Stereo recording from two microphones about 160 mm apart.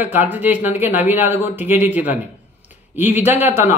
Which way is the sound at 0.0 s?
10° right (ahead or behind).